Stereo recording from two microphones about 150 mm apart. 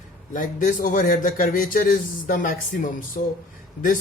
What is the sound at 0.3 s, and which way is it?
Speech, 60° left (ahead or behind).